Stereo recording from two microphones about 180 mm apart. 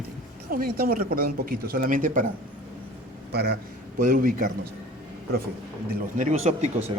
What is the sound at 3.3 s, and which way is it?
Speech, 60° right (ahead or behind).